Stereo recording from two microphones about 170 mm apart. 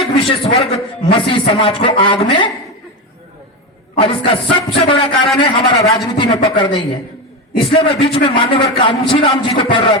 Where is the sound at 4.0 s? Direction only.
30° left (ahead or behind).